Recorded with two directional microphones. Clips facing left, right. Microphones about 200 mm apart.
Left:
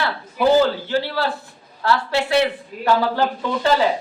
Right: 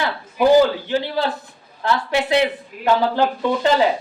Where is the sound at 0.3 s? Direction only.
15° right (ahead or behind).